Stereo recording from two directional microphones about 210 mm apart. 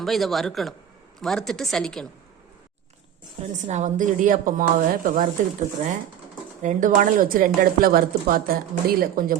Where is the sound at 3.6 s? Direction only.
35° right (ahead or behind).